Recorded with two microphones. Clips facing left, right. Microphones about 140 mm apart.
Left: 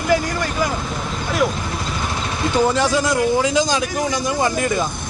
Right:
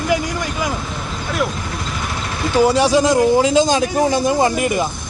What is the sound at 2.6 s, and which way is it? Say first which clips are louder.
Speech: right 6 dB; 15° right (ahead or behind).